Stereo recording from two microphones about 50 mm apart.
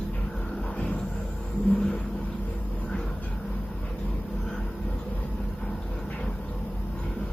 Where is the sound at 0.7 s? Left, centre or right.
Left.